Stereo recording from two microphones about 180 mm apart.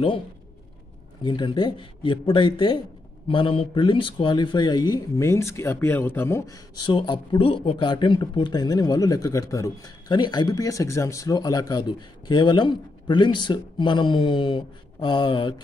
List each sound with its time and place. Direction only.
1.2 s speech: 25° left (ahead or behind)